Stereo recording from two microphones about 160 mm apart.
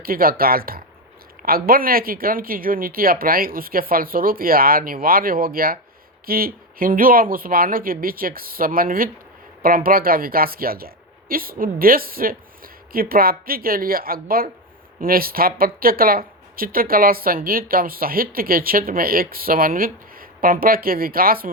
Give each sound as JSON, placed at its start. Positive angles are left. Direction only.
{"t": 0.0, "sound": "speech", "side_deg": -65}